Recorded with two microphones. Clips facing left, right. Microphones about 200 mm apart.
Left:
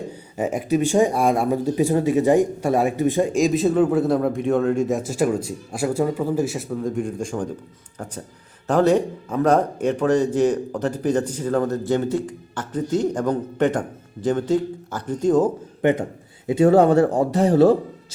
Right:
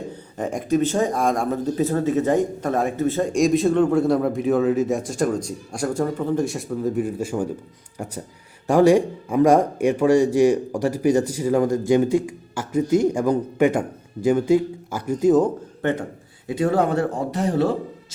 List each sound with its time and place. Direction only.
0.3 s speech: 5° left (ahead or behind)
3.3 s a man's voice: centre (ahead or behind)
15.8 s a man's voice: 15° left (ahead or behind)
16.5 s speech: 25° left (ahead or behind)